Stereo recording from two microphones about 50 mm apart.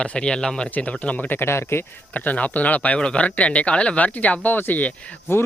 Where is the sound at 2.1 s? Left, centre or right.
Left.